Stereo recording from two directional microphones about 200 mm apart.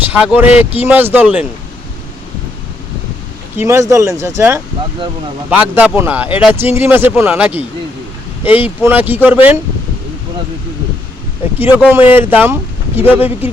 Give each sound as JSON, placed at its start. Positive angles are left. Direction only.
{"t": 0.0, "sound": "speech", "side_deg": -10}
{"t": 3.6, "sound": "speech", "side_deg": -15}
{"t": 11.6, "sound": "speech", "side_deg": -10}